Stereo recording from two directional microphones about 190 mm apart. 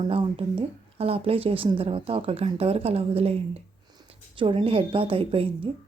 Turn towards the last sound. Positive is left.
turn(degrees=-30)  # may be behind; listen again after turning